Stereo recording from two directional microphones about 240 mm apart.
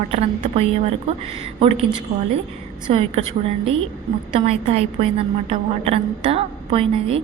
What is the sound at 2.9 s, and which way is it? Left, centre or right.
A woman's voice, right.